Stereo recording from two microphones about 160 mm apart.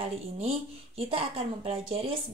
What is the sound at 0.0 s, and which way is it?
Speech, 35° right (ahead or behind).